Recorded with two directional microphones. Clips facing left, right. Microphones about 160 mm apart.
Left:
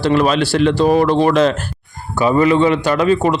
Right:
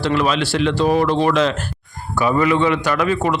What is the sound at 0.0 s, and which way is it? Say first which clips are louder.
Speech: left 4 dB; 40° left (ahead or behind).